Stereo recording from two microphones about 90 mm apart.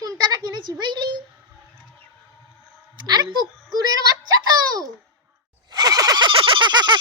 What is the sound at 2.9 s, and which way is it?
A child's voice, 55° right (ahead or behind).